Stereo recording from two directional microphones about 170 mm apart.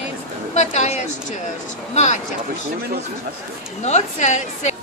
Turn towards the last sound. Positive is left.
turn(degrees=45)  # may be behind; listen again after turning